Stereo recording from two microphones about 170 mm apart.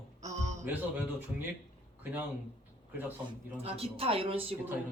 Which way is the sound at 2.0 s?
10° right (ahead or behind).